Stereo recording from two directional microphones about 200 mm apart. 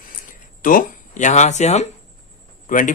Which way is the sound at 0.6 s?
45° left (ahead or behind).